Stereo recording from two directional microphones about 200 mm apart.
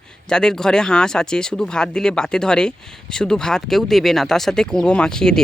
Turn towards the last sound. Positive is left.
turn(degrees=5)  # may be behind; listen again after turning